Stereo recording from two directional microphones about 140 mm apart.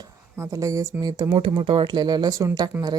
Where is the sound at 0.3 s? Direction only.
20° right (ahead or behind).